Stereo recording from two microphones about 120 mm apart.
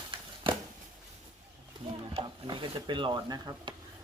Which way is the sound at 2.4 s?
40° right (ahead or behind).